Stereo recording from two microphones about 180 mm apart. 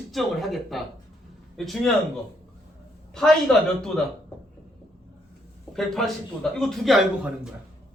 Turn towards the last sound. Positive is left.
turn(degrees=0)  # may be behind; listen again after turning